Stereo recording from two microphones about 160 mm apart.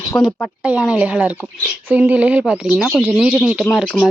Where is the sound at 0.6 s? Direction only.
5° right (ahead or behind).